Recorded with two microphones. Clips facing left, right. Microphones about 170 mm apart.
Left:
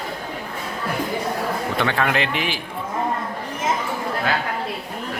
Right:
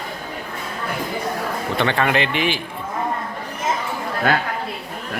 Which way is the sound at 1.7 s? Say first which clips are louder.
Right 3 dB; centre (ahead or behind).